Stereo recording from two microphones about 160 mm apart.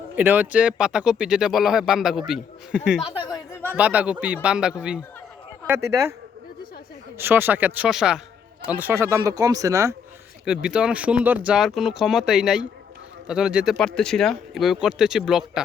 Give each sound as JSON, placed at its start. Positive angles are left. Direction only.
{"t": 0.2, "sound": "speech", "side_deg": -10}
{"t": 7.2, "sound": "speech", "side_deg": -15}
{"t": 10.4, "sound": "speech", "side_deg": -5}